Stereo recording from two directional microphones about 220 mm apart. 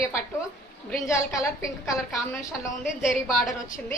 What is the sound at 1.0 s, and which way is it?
Speech, 15° left (ahead or behind).